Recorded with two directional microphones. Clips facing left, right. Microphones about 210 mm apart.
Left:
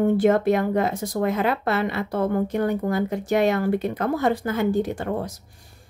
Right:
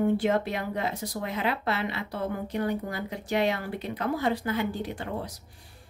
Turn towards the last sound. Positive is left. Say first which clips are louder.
# left 8 dB
turn(degrees=45)  # may be behind; listen again after turning